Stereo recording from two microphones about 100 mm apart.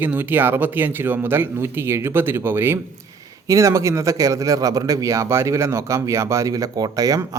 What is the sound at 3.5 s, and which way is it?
Speech, 30° right (ahead or behind).